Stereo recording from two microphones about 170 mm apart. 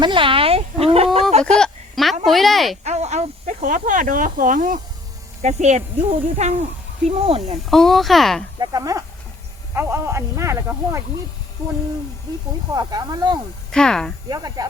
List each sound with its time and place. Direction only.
0.0 s chicken: 30° right (ahead or behind)
1.3 s a sound: 40° right (ahead or behind)
1.5 s a sound: centre (ahead or behind)
2.8 s speech: 40° right (ahead or behind)
7.7 s speech: centre (ahead or behind)
8.5 s speech: 20° right (ahead or behind)
12.7 s speech: 25° right (ahead or behind)
13.7 s speech: 5° left (ahead or behind)
14.3 s speech: 25° right (ahead or behind)